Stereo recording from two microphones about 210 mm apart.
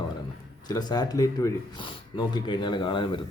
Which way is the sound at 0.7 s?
20° left (ahead or behind).